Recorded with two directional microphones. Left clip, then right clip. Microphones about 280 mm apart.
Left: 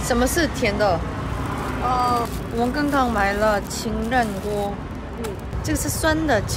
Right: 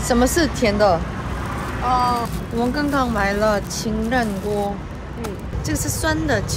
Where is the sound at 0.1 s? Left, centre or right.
Centre.